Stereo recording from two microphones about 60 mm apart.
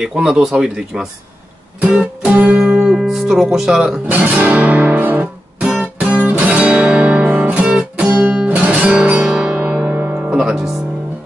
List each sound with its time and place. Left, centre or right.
0.0 s speech: centre
2.0 s music: centre
2.6 s music: centre
3.5 s speech: centre
4.1 s music: right; by 8.1 s centre
8.1 s music: right
9.5 s music: right
10.3 s music: centre